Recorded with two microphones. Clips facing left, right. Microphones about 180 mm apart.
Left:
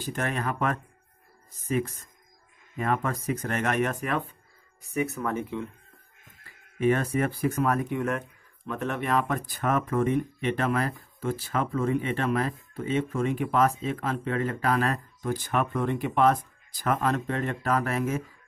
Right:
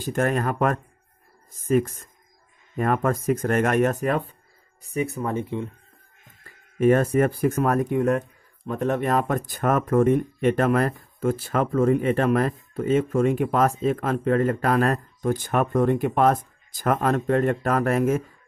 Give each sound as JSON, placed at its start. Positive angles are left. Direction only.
{"t": 0.0, "sound": "speech", "side_deg": -45}
{"t": 6.8, "sound": "speech", "side_deg": -45}